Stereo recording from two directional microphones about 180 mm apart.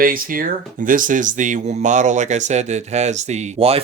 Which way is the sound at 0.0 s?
50° right (ahead or behind).